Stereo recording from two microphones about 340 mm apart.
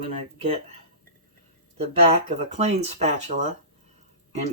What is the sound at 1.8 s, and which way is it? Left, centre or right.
Speech, centre.